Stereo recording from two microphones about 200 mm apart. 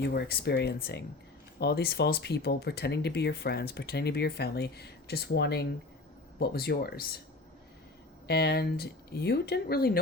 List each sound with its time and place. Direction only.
0.0 s speech: 55° left (ahead or behind)
8.3 s speech: 55° left (ahead or behind)